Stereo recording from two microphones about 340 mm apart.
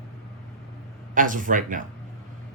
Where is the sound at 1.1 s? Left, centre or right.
Right.